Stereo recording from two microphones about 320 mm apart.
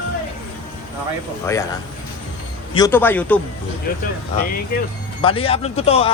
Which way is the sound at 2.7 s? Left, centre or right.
Centre.